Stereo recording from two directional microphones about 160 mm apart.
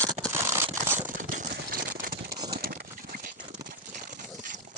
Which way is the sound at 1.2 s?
55° right (ahead or behind).